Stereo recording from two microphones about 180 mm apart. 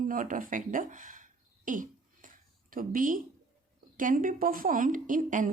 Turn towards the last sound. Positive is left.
turn(degrees=-45)  # may be behind; listen again after turning